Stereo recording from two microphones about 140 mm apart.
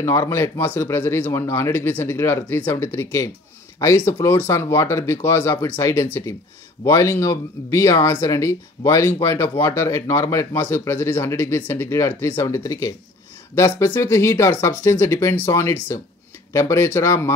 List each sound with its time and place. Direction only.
0.0 s speech: 20° left (ahead or behind)